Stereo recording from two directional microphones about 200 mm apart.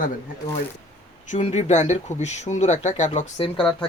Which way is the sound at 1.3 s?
35° left (ahead or behind).